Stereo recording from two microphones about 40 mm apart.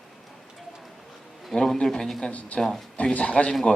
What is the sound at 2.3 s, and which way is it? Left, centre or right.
Speech, left.